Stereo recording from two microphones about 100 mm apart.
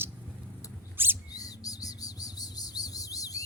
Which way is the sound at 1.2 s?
40° left (ahead or behind).